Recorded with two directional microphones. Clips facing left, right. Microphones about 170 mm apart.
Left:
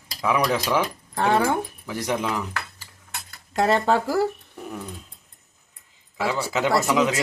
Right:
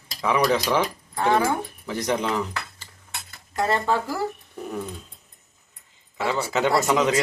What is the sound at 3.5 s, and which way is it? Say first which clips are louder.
Speech: left 3 dB; 75° left (ahead or behind).